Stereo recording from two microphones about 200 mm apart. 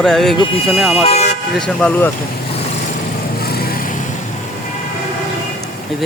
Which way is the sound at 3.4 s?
50° left (ahead or behind).